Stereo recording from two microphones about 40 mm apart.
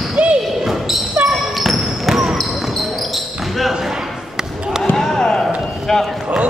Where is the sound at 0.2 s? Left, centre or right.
Right.